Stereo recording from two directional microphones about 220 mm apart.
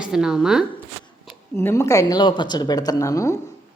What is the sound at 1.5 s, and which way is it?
Speech, 15° left (ahead or behind).